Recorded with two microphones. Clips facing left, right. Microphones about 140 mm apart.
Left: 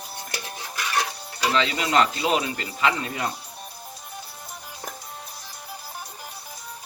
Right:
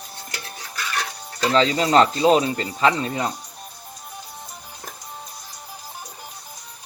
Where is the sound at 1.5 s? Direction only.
35° right (ahead or behind).